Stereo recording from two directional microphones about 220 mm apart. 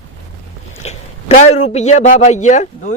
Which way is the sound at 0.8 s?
30° left (ahead or behind).